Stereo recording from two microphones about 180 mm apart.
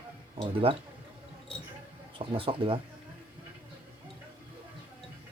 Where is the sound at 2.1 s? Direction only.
30° right (ahead or behind).